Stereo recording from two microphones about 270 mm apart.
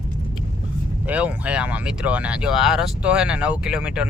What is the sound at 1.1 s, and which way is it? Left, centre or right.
Speech, centre.